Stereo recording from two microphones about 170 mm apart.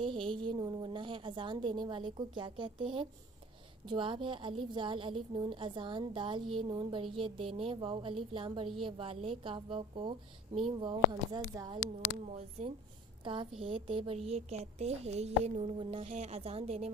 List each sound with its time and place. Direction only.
0.0 s a woman's voice: 30° right (ahead or behind)
12.4 s a woman's voice: 35° right (ahead or behind)